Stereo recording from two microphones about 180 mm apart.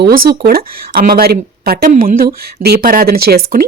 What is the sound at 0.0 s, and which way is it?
A woman's voice, 55° right (ahead or behind).